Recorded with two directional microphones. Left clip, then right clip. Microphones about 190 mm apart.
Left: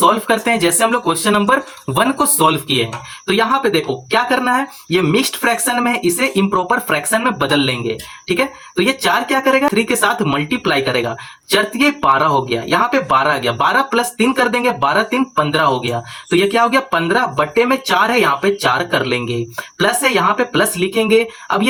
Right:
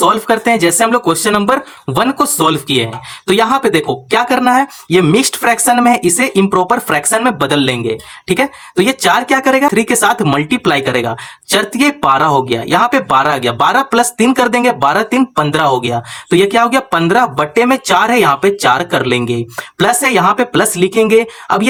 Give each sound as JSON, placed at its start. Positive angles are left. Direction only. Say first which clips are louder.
{"t": 0.3, "sound": "speech", "louder": "right 4 dB", "side_deg": -35}
{"t": 3.2, "sound": "speech", "louder": "right 4 dB", "side_deg": -40}